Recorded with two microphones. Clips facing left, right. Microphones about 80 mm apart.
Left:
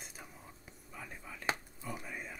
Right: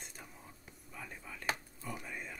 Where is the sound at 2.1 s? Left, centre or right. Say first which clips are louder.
Even; centre.